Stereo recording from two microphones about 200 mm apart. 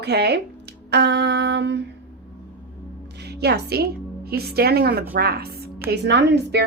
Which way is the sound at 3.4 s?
55° right (ahead or behind).